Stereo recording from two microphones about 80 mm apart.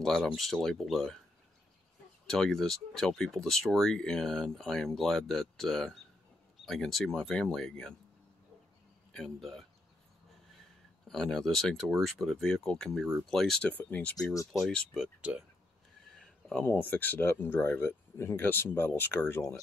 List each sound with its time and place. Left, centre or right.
0.0 s speech: centre
2.2 s speech: centre
9.1 s speech: centre
11.1 s speech: centre
13.7 s speech: left
14.3 s speech: left
15.0 s speech: centre
16.1 s a sound: centre
16.6 s speech: left